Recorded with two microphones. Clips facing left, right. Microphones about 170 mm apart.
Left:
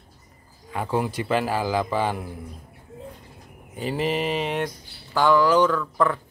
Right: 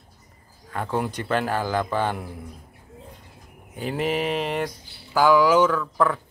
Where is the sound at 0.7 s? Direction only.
10° left (ahead or behind).